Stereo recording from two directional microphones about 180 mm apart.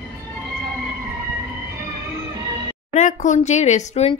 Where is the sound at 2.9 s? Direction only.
45° left (ahead or behind).